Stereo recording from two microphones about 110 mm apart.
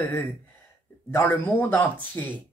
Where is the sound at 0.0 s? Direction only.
20° left (ahead or behind).